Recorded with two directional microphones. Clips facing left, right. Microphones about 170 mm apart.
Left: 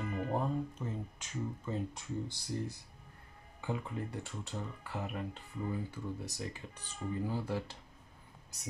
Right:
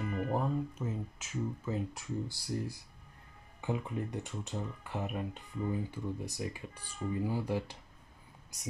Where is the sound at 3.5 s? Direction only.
20° right (ahead or behind).